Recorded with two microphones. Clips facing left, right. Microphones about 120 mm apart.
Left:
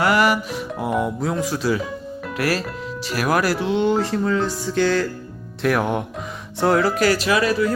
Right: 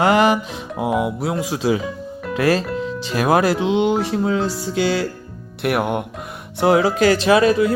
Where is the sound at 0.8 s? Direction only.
15° right (ahead or behind).